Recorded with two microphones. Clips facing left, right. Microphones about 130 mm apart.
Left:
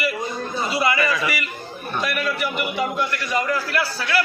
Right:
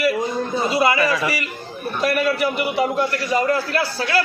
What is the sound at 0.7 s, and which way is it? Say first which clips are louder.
Speech: right 3 dB; 30° right (ahead or behind).